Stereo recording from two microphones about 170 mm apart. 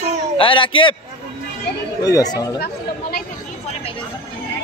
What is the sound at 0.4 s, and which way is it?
Speech, 30° left (ahead or behind).